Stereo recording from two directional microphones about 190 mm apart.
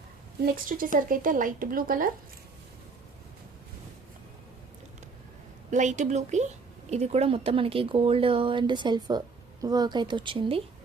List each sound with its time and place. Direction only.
0.5 s a woman's voice: 50° right (ahead or behind)
5.7 s speech: 40° right (ahead or behind)